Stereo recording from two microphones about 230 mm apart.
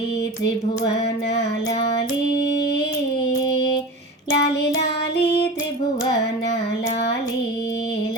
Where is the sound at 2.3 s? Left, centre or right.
Left.